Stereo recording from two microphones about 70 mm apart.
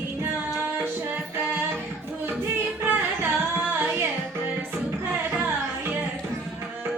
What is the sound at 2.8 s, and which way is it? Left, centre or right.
Music, right.